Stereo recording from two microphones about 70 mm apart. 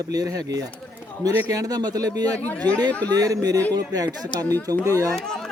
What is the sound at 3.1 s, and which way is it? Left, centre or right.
Speech, right.